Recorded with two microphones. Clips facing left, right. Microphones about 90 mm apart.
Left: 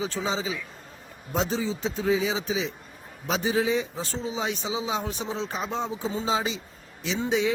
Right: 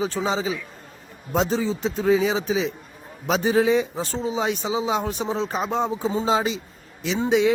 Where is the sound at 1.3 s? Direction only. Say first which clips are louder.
Right 5 dB; 65° right (ahead or behind).